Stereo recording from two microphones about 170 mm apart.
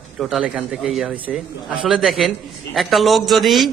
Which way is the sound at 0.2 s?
5° right (ahead or behind).